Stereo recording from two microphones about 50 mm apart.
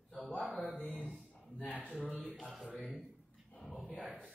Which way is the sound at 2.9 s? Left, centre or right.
Centre.